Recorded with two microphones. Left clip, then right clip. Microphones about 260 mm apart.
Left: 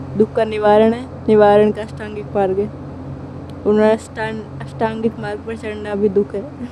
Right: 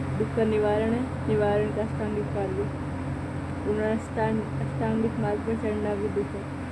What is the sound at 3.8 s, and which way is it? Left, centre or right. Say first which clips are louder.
Speech: left 11 dB; left.